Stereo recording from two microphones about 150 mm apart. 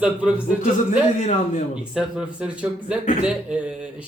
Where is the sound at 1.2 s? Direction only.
50° left (ahead or behind).